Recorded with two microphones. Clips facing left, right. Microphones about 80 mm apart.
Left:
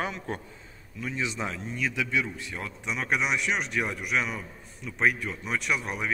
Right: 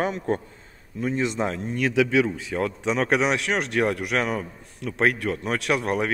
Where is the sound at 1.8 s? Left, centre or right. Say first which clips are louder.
Right 9 dB; right.